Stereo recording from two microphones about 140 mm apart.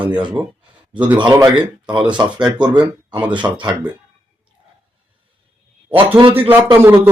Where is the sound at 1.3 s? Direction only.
20° right (ahead or behind).